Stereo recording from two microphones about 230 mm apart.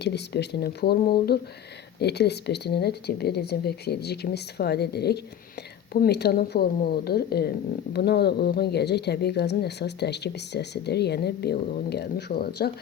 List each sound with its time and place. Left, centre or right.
0.0 s speech: left